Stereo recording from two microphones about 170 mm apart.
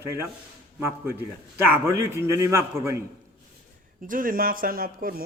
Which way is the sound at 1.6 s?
15° right (ahead or behind).